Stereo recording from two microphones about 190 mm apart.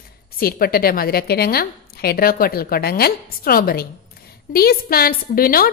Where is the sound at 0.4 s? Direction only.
50° left (ahead or behind).